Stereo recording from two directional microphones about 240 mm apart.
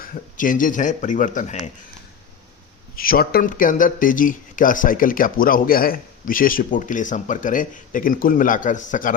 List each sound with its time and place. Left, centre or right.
0.0 s speech: left
2.9 s speech: left